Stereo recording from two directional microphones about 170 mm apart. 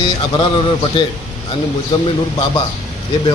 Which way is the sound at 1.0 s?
30° left (ahead or behind).